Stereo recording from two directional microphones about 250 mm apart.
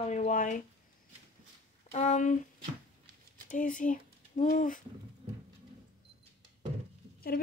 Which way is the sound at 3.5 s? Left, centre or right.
Left.